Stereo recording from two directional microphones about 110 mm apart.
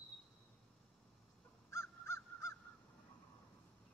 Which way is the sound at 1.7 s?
25° left (ahead or behind).